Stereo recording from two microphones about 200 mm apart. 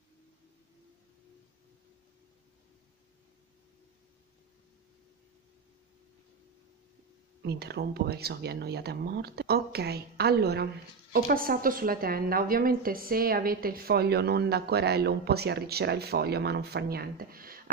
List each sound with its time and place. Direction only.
7.4 s a woman's voice: 55° right (ahead or behind)